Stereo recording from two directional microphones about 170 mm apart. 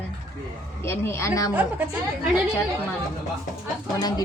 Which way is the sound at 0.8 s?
15° left (ahead or behind).